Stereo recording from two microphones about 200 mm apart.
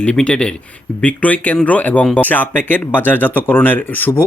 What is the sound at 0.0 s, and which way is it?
Speech, 5° left (ahead or behind).